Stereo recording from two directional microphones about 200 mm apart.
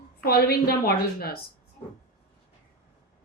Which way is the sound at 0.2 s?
50° left (ahead or behind).